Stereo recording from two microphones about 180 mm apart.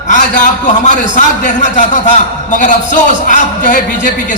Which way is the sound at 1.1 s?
45° left (ahead or behind).